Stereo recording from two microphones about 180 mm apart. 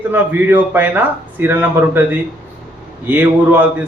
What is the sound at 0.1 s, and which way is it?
A man's voice, 10° right (ahead or behind).